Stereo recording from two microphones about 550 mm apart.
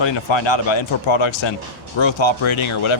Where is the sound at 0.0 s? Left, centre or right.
Left.